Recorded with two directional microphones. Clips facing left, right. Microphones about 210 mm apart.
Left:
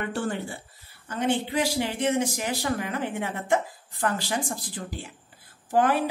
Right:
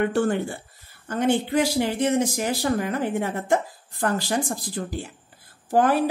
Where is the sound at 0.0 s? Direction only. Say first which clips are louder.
Right 7 dB; 55° right (ahead or behind).